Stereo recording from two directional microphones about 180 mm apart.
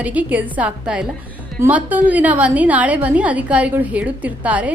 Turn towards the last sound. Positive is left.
turn(degrees=-10)  # may be behind; listen again after turning